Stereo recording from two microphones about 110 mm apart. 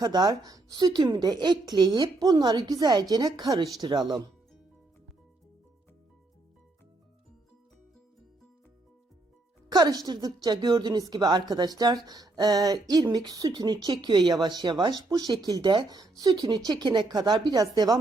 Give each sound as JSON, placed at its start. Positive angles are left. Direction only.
{"t": 0.0, "sound": "speech", "side_deg": -40}
{"t": 9.6, "sound": "speech", "side_deg": -40}